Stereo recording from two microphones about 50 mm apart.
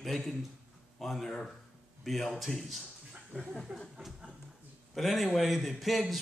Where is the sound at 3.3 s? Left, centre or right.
Right.